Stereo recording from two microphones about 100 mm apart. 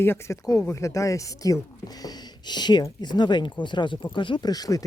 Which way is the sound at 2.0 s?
45° left (ahead or behind).